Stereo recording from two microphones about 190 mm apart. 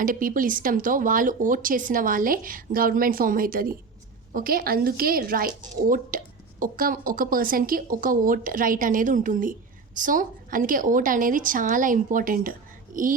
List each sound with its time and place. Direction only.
0.0 s a woman's voice: 45° right (ahead or behind)